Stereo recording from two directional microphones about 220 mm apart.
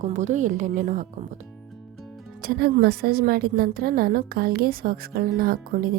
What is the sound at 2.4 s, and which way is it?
A woman's voice, 45° right (ahead or behind).